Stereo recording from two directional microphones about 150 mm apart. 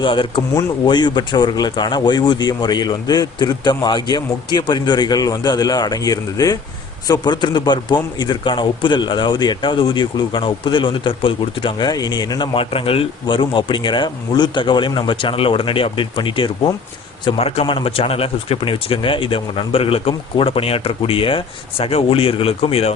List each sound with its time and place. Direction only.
0.0 s a man's voice: 35° left (ahead or behind)